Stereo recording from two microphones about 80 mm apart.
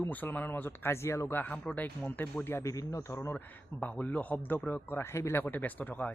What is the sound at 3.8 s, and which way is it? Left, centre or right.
Speech, centre.